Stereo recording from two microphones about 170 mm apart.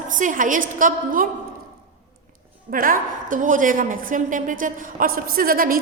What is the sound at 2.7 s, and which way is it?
A woman's voice, 55° right (ahead or behind).